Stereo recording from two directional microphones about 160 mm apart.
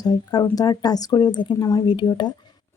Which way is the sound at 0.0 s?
25° left (ahead or behind).